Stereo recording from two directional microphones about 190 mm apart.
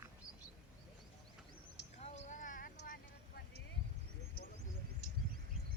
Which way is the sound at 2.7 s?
60° left (ahead or behind).